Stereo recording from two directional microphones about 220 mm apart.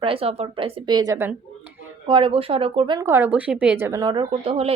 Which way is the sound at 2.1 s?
25° right (ahead or behind).